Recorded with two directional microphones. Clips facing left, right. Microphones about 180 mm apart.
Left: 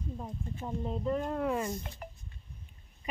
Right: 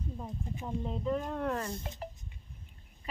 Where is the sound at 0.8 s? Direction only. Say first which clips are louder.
Left 2 dB; centre (ahead or behind).